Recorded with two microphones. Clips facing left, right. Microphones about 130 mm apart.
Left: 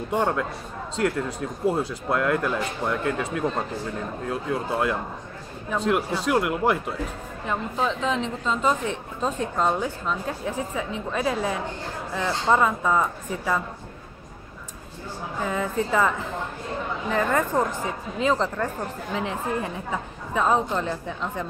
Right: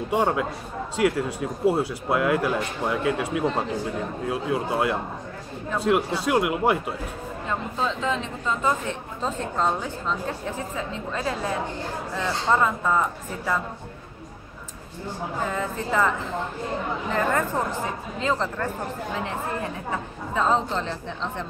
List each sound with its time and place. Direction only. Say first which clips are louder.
0.1 s speech: right 1 dB; 5° right (ahead or behind)
4.3 s speech: right 1 dB; 5° right (ahead or behind)
7.4 s a woman's voice: left 2 dB; 15° left (ahead or behind)
15.5 s a woman's voice: left 4 dB; 15° left (ahead or behind)
17.1 s a woman's voice: left 2 dB; 15° left (ahead or behind)
20.3 s a woman's voice: left 1 dB; 15° left (ahead or behind)